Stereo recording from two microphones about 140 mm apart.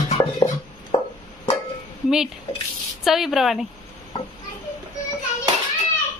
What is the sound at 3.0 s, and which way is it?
Speech, centre (ahead or behind).